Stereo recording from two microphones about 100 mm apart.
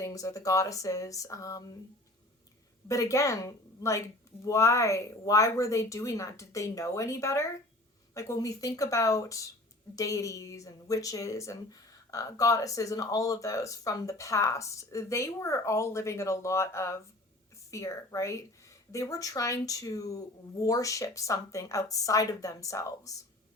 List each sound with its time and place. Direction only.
0.0 s a woman's voice: 30° left (ahead or behind)
2.8 s a woman's voice: 30° left (ahead or behind)